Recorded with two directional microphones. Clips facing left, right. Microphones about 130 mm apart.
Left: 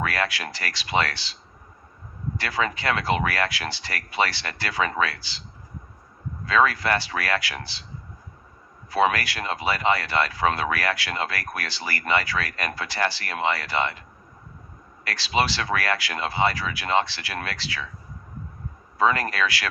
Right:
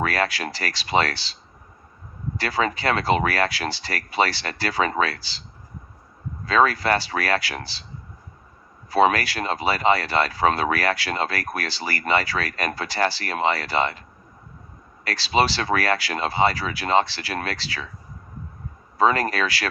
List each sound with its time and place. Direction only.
0.0 s speech: 35° right (ahead or behind)
2.4 s speech: 35° right (ahead or behind)
6.4 s speech: 35° right (ahead or behind)
8.9 s speech: 35° right (ahead or behind)
15.0 s speech: 35° right (ahead or behind)
18.9 s speech: 35° right (ahead or behind)